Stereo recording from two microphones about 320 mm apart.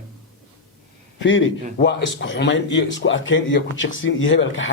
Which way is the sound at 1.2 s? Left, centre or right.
Left.